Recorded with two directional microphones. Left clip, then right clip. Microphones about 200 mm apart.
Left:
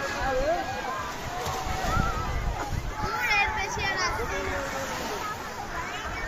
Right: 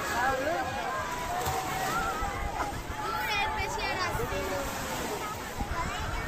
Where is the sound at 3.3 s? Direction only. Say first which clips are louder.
Left 7 dB; 20° right (ahead or behind).